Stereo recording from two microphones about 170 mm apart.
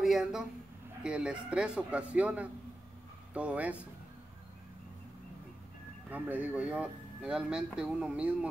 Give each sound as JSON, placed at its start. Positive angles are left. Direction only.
{"t": 0.0, "sound": "a woman's voice", "side_deg": -5}
{"t": 6.0, "sound": "speech", "side_deg": -10}